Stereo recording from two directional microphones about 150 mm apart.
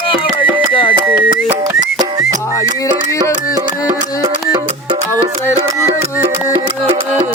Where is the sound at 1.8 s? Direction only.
25° right (ahead or behind).